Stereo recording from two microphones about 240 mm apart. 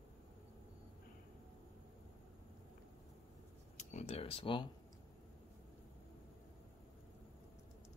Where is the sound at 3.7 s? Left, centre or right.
Left.